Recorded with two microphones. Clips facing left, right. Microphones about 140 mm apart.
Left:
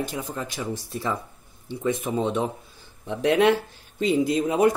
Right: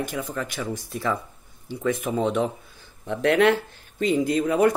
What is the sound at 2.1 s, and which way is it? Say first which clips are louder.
Speech: right 3 dB; 20° left (ahead or behind).